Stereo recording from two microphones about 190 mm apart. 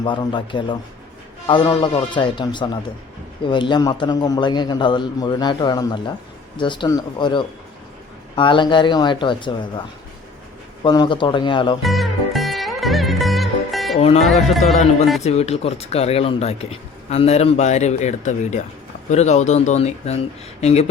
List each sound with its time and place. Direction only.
0.0 s a man's voice: 25° left (ahead or behind)
10.8 s a man's voice: 25° left (ahead or behind)
11.8 s music: centre (ahead or behind)
15.2 s speech: 35° left (ahead or behind)